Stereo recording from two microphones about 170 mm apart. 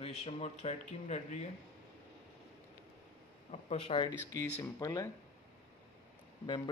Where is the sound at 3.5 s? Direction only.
35° left (ahead or behind); by 5.1 s 20° left (ahead or behind).